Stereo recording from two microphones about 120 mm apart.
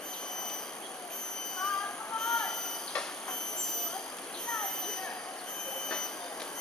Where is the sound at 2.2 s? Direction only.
5° left (ahead or behind).